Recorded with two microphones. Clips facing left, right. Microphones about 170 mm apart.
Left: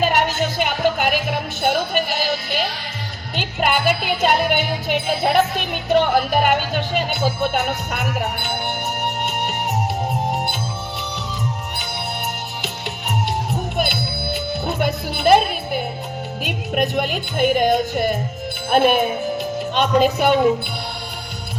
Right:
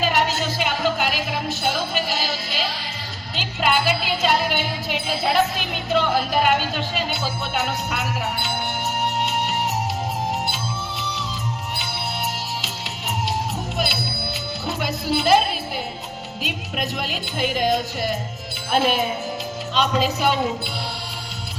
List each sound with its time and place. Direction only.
0.0 s music: 55° left (ahead or behind)
12.6 s music: 55° left (ahead or behind)